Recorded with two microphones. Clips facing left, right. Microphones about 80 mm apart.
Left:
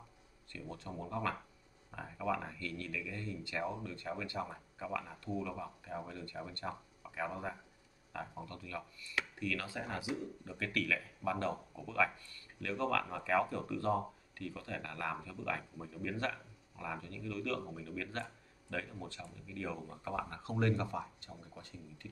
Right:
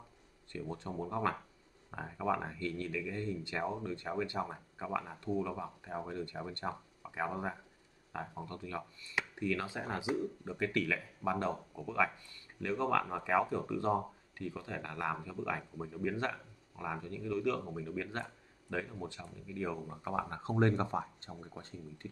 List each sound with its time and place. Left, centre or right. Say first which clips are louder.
0.7 s speech: right 3 dB; right